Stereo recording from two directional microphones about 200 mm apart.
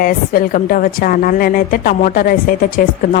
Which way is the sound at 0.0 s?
45° left (ahead or behind).